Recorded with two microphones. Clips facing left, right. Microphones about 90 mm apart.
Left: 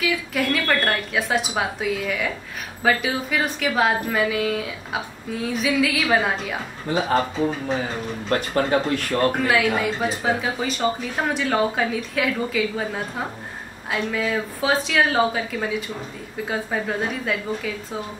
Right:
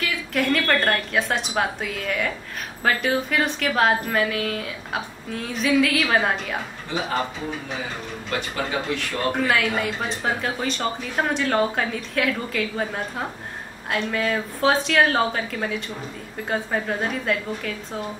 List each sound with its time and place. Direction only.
0.0 s speech: 5° left (ahead or behind)
8.3 s speech: 45° left (ahead or behind)
9.5 s speech: centre (ahead or behind)